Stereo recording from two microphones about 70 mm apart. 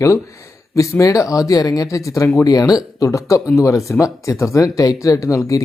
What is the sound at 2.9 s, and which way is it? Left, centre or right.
Speech, left.